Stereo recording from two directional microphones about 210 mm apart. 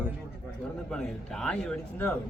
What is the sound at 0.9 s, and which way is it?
A man's voice, 5° left (ahead or behind).